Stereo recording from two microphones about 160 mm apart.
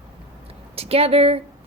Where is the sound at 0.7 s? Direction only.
40° right (ahead or behind).